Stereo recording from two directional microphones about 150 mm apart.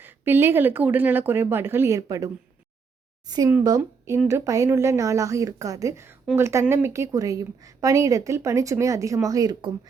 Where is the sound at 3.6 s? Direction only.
25° right (ahead or behind).